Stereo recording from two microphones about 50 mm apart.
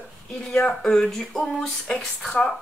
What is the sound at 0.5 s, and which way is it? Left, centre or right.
Speech, left.